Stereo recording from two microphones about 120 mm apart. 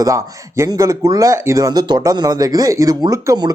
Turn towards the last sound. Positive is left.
turn(degrees=-30)  # may be behind; listen again after turning